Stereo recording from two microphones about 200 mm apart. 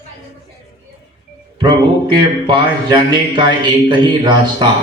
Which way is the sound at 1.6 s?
20° right (ahead or behind).